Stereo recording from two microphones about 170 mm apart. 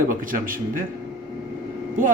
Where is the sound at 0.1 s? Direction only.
55° right (ahead or behind).